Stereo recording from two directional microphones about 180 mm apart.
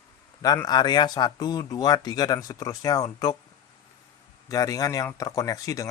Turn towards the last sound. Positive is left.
turn(degrees=20)  # may be behind; listen again after turning